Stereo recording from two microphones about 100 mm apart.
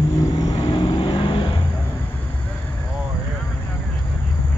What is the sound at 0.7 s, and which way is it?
Vehicle, 50° left (ahead or behind).